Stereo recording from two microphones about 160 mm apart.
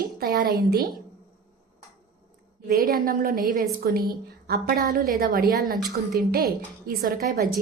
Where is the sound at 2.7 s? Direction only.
65° right (ahead or behind).